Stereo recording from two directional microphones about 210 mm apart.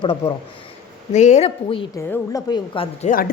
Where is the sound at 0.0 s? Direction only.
25° left (ahead or behind).